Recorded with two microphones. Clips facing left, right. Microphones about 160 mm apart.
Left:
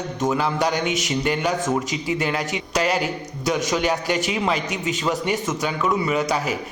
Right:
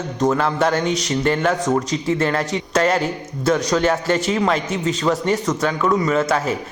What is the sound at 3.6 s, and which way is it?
A man's voice, 20° left (ahead or behind).